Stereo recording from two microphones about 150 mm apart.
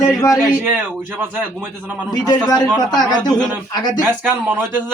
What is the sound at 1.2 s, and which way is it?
Speech, 10° right (ahead or behind).